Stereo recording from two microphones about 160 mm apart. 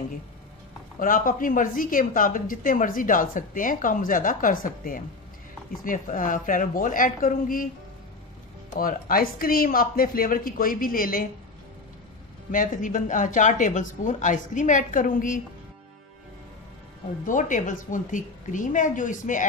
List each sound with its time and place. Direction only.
0.9 s a woman's voice: 60° left (ahead or behind)
8.7 s a woman's voice: 65° left (ahead or behind)
12.4 s speech: 55° left (ahead or behind)
17.3 s speech: 55° left (ahead or behind)